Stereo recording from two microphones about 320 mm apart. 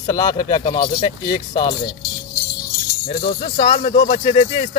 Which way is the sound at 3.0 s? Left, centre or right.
Centre.